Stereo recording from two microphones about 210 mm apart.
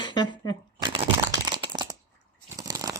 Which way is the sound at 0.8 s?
20° right (ahead or behind).